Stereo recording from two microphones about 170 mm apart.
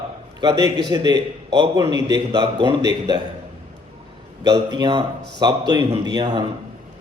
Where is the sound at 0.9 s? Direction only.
25° right (ahead or behind).